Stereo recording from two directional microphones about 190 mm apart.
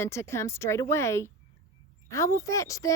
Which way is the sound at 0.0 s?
15° left (ahead or behind).